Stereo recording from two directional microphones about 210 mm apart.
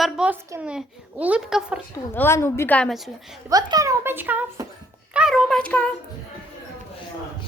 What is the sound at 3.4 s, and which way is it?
A child's voice, 15° right (ahead or behind).